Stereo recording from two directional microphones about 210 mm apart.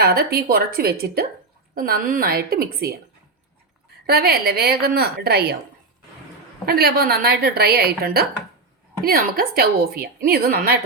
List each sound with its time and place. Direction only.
0.0 s a woman's voice: 45° right (ahead or behind)
4.0 s a woman's voice: 45° right (ahead or behind)
6.7 s a woman's voice: 45° right (ahead or behind)